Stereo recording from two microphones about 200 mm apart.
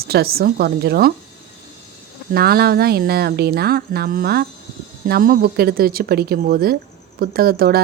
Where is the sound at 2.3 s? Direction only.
50° right (ahead or behind).